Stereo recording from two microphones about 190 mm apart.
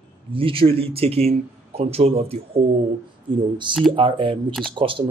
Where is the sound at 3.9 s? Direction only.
25° right (ahead or behind).